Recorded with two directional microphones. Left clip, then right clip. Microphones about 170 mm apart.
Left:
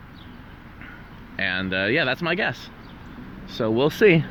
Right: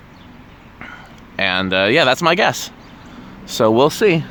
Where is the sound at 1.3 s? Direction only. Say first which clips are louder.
Right 8 dB; 40° right (ahead or behind).